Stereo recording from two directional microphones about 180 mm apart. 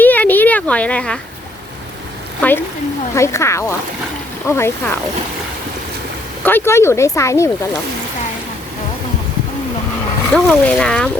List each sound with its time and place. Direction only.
0.0 s a sound: 10° left (ahead or behind)
2.4 s speech: 10° left (ahead or behind)
6.4 s speech: 10° left (ahead or behind)
10.3 s speech: 5° left (ahead or behind)